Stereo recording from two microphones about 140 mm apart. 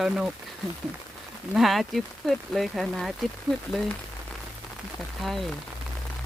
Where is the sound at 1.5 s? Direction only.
Centre (ahead or behind).